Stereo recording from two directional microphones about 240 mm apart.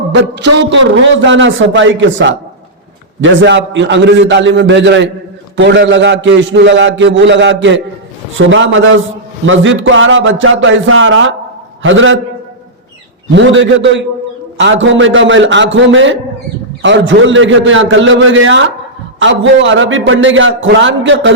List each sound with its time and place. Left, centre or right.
0.3 s a man's voice: right
13.3 s a man's voice: right